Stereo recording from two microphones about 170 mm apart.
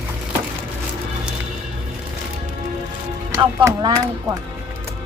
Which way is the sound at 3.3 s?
15° right (ahead or behind).